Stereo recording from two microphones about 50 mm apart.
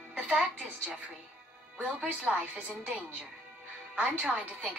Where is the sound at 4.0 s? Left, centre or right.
Right.